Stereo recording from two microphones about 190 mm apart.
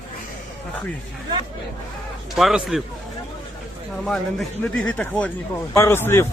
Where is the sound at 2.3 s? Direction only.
Centre (ahead or behind).